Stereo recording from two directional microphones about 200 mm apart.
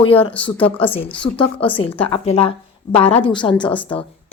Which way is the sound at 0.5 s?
10° left (ahead or behind).